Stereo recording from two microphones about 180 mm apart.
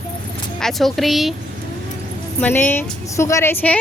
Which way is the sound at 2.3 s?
10° left (ahead or behind).